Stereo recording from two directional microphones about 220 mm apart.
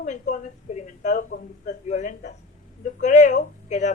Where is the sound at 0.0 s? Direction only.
35° left (ahead or behind).